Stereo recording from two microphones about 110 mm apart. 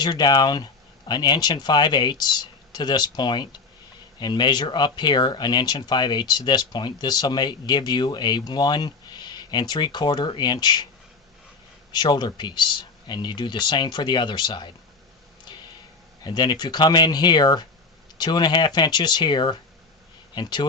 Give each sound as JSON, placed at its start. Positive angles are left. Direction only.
{"t": 0.0, "sound": "speech", "side_deg": 40}
{"t": 11.9, "sound": "speech", "side_deg": 40}
{"t": 16.2, "sound": "speech", "side_deg": 40}